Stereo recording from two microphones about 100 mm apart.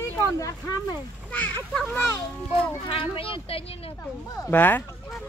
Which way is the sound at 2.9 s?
65° left (ahead or behind).